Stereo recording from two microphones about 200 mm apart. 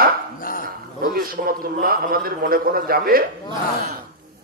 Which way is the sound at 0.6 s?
45° right (ahead or behind).